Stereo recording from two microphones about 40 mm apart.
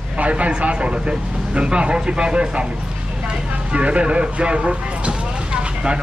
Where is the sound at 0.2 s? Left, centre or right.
Right.